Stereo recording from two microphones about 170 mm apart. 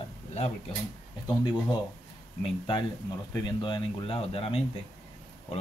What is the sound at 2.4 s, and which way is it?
Speech, 30° left (ahead or behind).